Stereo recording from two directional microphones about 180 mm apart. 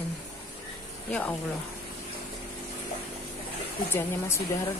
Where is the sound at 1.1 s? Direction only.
10° left (ahead or behind).